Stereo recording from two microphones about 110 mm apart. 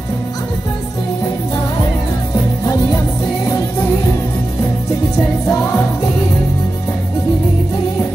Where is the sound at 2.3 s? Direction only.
30° left (ahead or behind).